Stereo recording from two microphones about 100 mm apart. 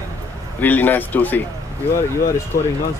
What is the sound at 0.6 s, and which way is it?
Speech, 20° left (ahead or behind).